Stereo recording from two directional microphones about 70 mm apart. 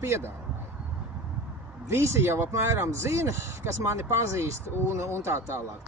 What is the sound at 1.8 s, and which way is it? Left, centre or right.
Speech, right.